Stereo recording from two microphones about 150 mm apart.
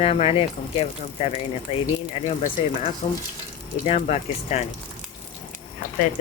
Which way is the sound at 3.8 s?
45° left (ahead or behind).